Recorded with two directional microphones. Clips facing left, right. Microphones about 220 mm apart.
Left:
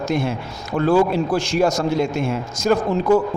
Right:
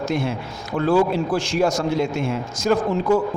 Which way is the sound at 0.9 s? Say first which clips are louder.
Left 1 dB; 45° left (ahead or behind).